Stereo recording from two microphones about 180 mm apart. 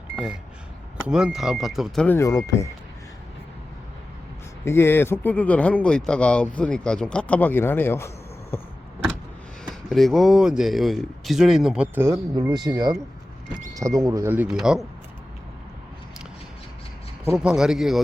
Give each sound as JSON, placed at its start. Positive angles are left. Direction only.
{"t": 1.0, "sound": "speech", "side_deg": -5}
{"t": 2.0, "sound": "speech", "side_deg": 15}
{"t": 4.6, "sound": "speech", "side_deg": 15}
{"t": 9.9, "sound": "speech", "side_deg": 0}
{"t": 17.3, "sound": "speech", "side_deg": -5}